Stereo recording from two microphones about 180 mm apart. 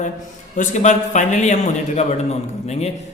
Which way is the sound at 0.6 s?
40° left (ahead or behind).